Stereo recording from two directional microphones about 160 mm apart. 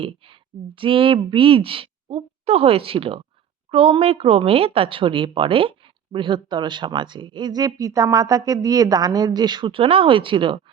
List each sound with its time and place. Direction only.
0.8 s speech: 35° right (ahead or behind)